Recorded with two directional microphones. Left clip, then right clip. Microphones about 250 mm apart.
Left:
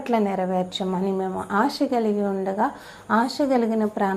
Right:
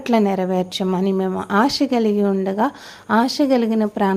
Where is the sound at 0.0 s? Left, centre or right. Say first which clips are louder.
Right 4 dB; right.